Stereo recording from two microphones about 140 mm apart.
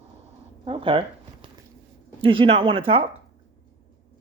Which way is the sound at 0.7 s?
40° right (ahead or behind).